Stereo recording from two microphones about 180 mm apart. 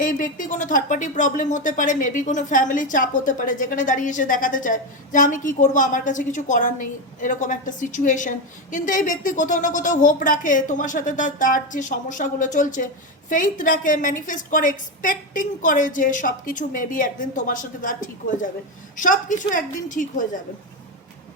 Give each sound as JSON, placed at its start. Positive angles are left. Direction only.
{"t": 0.0, "sound": "speech", "side_deg": 45}